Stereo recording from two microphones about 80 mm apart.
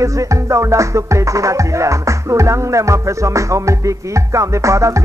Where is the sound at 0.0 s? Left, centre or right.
Right.